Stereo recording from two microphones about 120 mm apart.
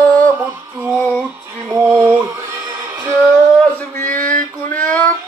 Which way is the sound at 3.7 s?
15° left (ahead or behind).